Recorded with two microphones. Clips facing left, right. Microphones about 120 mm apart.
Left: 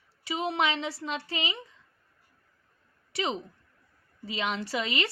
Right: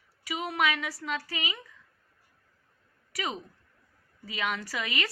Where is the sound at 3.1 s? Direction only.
25° left (ahead or behind).